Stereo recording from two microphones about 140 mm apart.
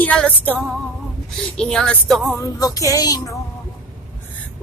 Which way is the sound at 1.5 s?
5° left (ahead or behind).